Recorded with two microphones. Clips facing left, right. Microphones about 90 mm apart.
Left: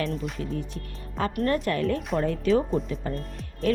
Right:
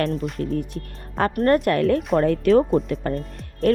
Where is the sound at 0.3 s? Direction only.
40° right (ahead or behind).